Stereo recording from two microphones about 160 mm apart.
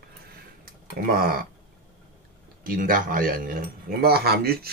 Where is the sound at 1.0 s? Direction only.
65° right (ahead or behind).